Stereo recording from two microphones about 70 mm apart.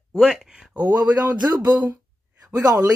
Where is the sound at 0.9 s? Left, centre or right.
Right.